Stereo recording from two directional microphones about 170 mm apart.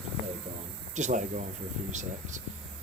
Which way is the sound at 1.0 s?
45° right (ahead or behind).